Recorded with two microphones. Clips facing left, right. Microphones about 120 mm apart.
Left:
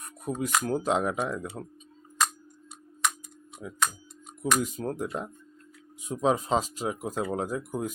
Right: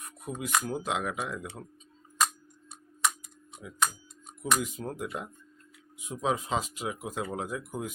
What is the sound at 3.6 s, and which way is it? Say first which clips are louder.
Speech: left 1 dB; 40° left (ahead or behind).